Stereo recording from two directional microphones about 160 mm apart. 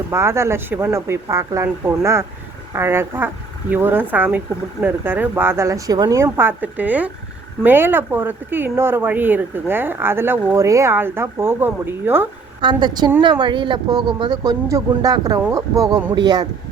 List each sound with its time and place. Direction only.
0.1 s speech: 15° right (ahead or behind)
12.6 s speech: 30° right (ahead or behind)